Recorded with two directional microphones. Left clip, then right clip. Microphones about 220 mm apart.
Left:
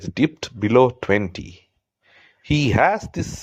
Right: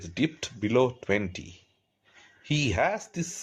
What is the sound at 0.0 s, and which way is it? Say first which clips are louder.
Speech: left 8 dB; 25° left (ahead or behind).